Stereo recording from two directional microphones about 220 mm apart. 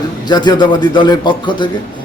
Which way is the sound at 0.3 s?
20° left (ahead or behind).